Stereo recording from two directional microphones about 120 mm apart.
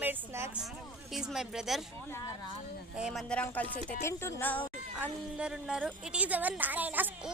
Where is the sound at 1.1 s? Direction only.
5° right (ahead or behind).